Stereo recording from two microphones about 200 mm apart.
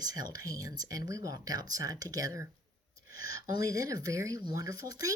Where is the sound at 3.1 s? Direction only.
50° left (ahead or behind).